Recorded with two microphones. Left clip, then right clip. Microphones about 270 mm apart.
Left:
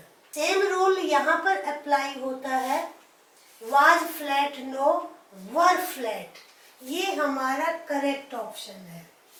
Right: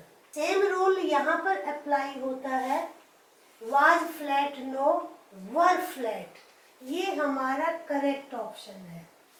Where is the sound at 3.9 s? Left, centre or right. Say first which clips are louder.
Left 3 dB; centre.